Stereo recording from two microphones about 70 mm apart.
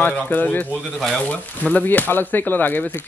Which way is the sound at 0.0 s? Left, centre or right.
Left.